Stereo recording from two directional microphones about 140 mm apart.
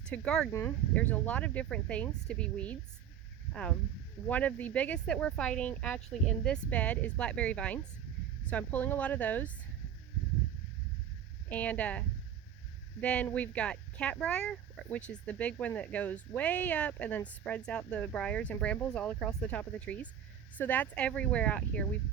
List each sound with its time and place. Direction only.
0.0 s speech: 5° left (ahead or behind)
0.5 s speech: 15° left (ahead or behind)
11.4 s speech: 10° left (ahead or behind)